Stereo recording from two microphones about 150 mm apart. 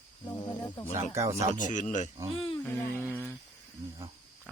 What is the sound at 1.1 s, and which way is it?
Speech, 20° right (ahead or behind).